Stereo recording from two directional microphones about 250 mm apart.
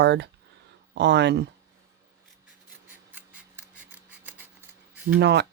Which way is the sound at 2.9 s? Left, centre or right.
Centre.